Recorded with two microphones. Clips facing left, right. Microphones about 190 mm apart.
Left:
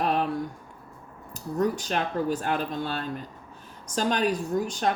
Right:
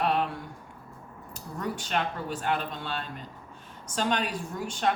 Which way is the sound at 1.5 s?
40° left (ahead or behind).